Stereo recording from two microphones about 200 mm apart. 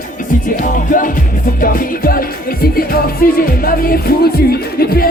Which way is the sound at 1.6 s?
45° left (ahead or behind).